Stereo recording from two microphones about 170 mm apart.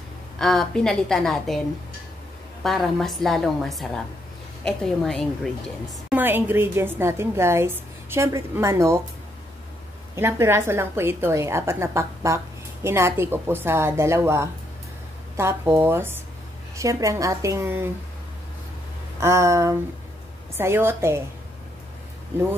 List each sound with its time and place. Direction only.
0.4 s a woman's voice: centre (ahead or behind)
2.6 s a woman's voice: centre (ahead or behind)
6.0 s a woman's voice: 10° right (ahead or behind)
10.1 s a woman's voice: 15° right (ahead or behind)
19.1 s a woman's voice: 15° right (ahead or behind)